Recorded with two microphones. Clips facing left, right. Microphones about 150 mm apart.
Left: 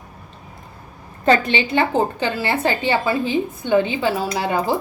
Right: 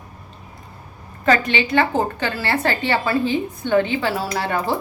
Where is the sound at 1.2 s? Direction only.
30° left (ahead or behind).